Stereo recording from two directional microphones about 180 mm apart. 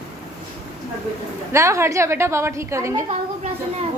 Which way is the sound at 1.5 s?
15° right (ahead or behind).